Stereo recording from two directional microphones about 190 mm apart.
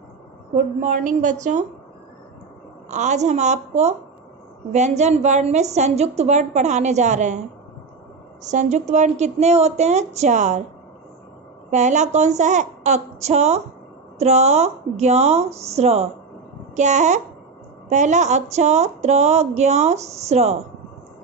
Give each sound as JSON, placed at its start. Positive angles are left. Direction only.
{"t": 0.6, "sound": "a woman's voice", "side_deg": -40}
{"t": 2.9, "sound": "a woman's voice", "side_deg": -40}
{"t": 8.5, "sound": "a woman's voice", "side_deg": -40}
{"t": 11.7, "sound": "a woman's voice", "side_deg": -40}